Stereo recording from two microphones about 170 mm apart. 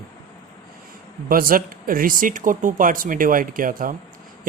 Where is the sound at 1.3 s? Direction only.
55° right (ahead or behind).